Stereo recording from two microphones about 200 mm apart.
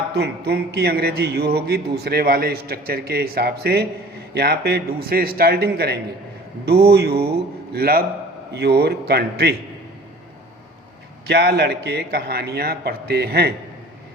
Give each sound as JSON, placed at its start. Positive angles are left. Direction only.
{"t": 0.1, "sound": "a man's voice", "side_deg": -55}
{"t": 11.3, "sound": "a man's voice", "side_deg": -55}